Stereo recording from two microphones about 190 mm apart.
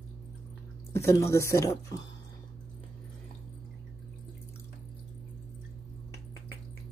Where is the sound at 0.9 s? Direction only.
15° left (ahead or behind).